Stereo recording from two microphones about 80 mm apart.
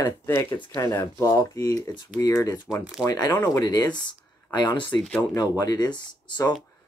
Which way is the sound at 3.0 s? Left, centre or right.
Left.